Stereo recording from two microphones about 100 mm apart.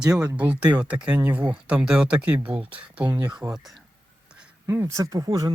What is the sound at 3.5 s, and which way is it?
Speech, centre (ahead or behind).